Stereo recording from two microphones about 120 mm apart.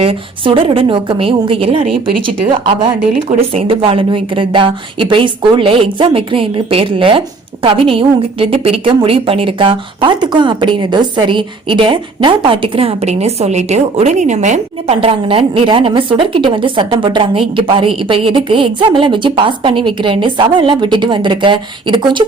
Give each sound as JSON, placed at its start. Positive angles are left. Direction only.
{"t": 0.0, "sound": "a woman's voice", "side_deg": -50}
{"t": 3.2, "sound": "a woman's voice", "side_deg": -50}
{"t": 15.0, "sound": "a woman's voice", "side_deg": -50}